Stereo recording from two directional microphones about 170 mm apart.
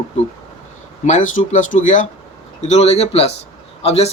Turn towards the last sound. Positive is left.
turn(degrees=40)  # may be behind; listen again after turning